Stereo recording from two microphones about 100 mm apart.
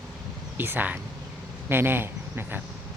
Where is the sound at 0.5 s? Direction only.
20° right (ahead or behind).